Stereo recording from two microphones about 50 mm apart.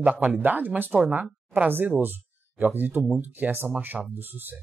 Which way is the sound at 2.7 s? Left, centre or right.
Right.